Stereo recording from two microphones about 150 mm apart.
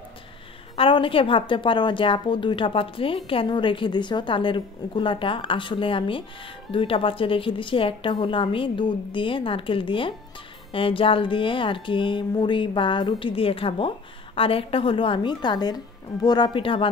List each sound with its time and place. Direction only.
0.7 s a woman's voice: 35° left (ahead or behind)